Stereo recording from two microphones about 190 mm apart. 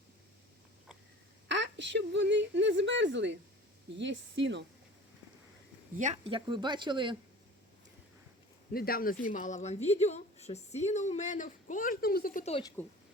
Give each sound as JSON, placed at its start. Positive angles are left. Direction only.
{"t": 1.5, "sound": "a woman's voice", "side_deg": -70}
{"t": 6.0, "sound": "speech", "side_deg": -40}
{"t": 6.3, "sound": "speech", "side_deg": -25}
{"t": 8.7, "sound": "a woman's voice", "side_deg": 50}
{"t": 12.8, "sound": "speech", "side_deg": 10}